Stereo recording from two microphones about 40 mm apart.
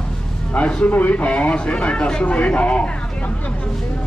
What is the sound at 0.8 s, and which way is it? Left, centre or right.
Speech, left.